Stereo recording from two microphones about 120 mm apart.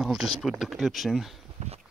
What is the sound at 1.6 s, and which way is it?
Horse, 75° right (ahead or behind).